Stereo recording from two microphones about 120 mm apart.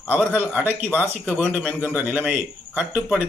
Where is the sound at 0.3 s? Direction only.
15° right (ahead or behind).